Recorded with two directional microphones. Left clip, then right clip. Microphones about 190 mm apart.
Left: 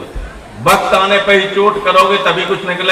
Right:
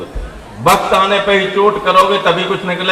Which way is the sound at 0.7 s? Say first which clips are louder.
Left 1 dB; 35° right (ahead or behind).